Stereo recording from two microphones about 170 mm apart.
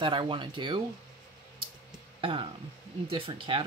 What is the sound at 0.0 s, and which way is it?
Speech, 30° right (ahead or behind).